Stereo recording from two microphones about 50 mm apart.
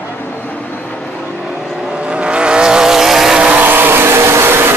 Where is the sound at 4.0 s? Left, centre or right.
Right.